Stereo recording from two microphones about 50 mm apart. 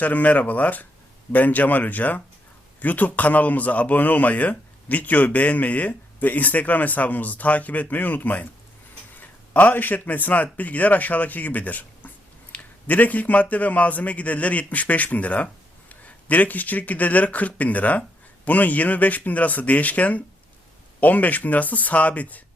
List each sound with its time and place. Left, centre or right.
0.0 s a man's voice: left